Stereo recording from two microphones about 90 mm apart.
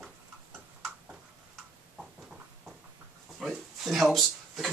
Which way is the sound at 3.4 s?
5° right (ahead or behind).